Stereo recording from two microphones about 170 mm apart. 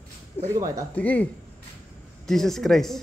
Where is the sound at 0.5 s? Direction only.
20° right (ahead or behind).